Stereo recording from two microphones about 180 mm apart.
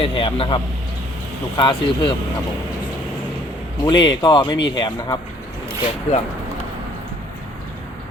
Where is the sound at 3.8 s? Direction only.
25° left (ahead or behind).